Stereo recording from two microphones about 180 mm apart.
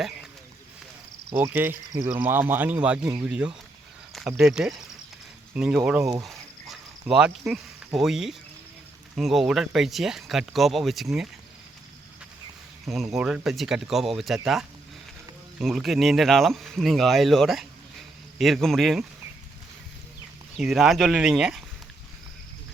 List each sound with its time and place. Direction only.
1.3 s speech: 10° right (ahead or behind)
1.9 s speech: 20° right (ahead or behind)
2.1 s speech: 10° right (ahead or behind)
6.2 s a sound: centre (ahead or behind)
7.9 s speech: centre (ahead or behind)
12.8 s speech: centre (ahead or behind)
20.6 s speech: centre (ahead or behind)